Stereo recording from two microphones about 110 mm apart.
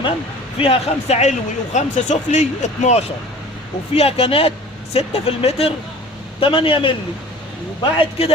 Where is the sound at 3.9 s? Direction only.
65° left (ahead or behind).